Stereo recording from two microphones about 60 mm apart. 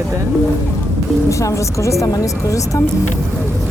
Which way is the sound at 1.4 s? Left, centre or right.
Left.